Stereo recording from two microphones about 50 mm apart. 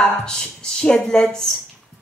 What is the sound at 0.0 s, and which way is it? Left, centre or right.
Speech, centre.